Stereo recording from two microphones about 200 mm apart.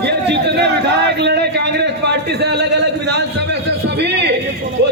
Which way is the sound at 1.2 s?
55° right (ahead or behind).